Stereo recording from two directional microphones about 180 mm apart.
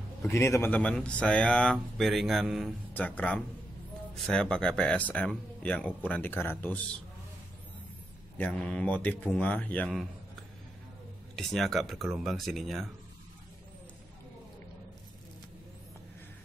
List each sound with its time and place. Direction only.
0.3 s speech: 15° left (ahead or behind)
8.4 s speech: 10° left (ahead or behind)
11.3 s speech: centre (ahead or behind)